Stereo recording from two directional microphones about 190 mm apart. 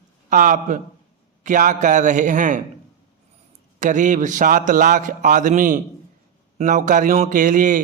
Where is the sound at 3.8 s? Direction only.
40° right (ahead or behind).